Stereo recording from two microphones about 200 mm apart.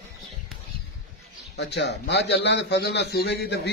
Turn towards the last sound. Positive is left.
turn(degrees=55)  # may be behind; listen again after turning